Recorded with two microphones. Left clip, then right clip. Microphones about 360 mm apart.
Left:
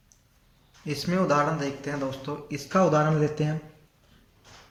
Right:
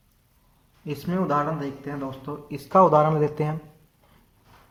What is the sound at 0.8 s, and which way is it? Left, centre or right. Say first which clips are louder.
Speech: left 1 dB; centre.